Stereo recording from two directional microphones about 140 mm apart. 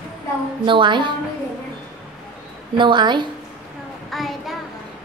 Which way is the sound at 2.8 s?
35° right (ahead or behind).